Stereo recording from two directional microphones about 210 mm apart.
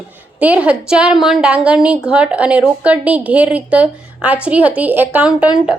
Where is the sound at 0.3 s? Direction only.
5° right (ahead or behind).